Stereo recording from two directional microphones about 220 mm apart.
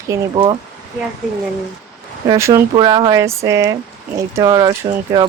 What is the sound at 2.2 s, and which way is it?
Speech, 15° right (ahead or behind).